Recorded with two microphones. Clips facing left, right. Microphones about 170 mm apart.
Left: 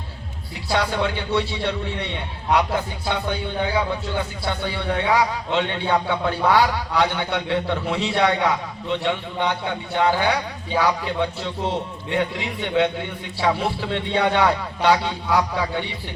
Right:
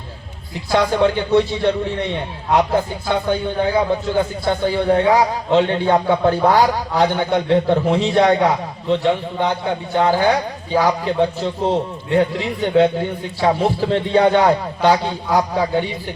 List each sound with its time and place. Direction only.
0.7 s a man's voice: 45° right (ahead or behind)
3.8 s a man's voice: 45° right (ahead or behind)